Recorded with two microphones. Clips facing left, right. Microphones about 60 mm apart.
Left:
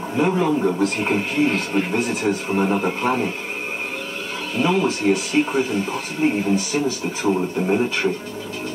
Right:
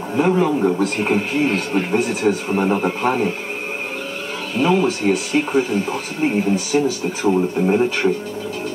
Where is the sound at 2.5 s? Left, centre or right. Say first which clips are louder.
Right 2 dB; centre.